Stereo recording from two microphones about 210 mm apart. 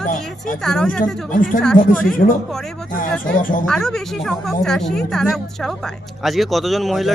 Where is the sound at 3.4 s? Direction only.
40° left (ahead or behind).